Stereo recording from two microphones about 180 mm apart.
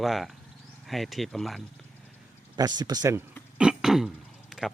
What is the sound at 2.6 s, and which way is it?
Speech, 20° right (ahead or behind).